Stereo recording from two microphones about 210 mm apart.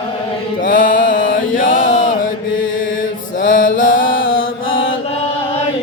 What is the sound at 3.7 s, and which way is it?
Mantra, 65° left (ahead or behind).